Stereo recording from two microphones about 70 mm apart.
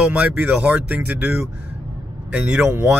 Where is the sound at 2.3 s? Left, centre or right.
Centre.